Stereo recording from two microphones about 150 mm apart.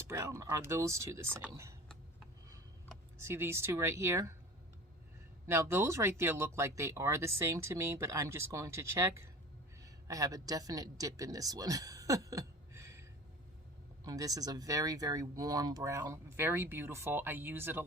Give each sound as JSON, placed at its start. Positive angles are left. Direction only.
{"t": 0.1, "sound": "speech", "side_deg": -20}
{"t": 3.2, "sound": "speech", "side_deg": -15}
{"t": 5.5, "sound": "a man's voice", "side_deg": -15}